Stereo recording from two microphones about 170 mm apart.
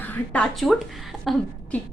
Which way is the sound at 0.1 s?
5° left (ahead or behind).